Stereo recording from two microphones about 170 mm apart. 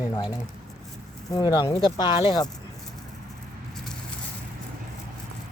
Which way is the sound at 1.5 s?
25° left (ahead or behind).